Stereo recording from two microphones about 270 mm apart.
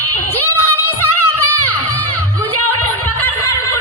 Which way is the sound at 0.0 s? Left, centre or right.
Left.